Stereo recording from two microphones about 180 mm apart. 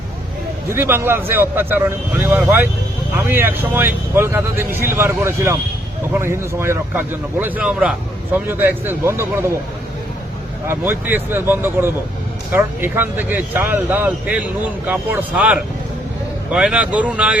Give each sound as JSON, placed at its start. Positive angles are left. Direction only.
{"t": 0.7, "sound": "a man's voice", "side_deg": -15}
{"t": 10.7, "sound": "a man's voice", "side_deg": -10}